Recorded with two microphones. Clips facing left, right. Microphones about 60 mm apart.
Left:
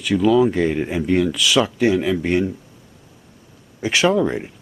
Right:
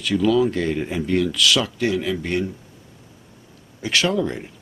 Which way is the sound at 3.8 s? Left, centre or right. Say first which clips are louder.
Left 4 dB; centre.